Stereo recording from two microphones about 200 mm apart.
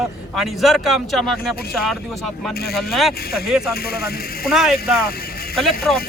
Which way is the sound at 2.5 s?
50° left (ahead or behind).